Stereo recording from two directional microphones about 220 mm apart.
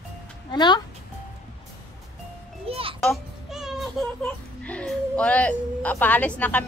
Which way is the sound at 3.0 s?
Centre (ahead or behind).